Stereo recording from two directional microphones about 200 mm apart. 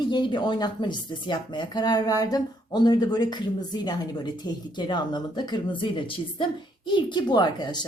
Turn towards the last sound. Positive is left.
turn(degrees=20)  # may be behind; listen again after turning